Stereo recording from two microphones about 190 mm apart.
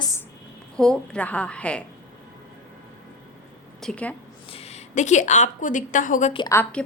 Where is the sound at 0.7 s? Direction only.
5° left (ahead or behind).